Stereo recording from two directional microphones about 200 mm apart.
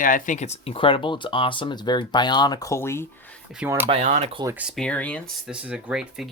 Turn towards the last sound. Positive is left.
turn(degrees=-5)  # may be behind; listen again after turning